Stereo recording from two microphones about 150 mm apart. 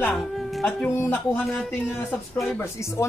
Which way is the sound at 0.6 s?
5° left (ahead or behind).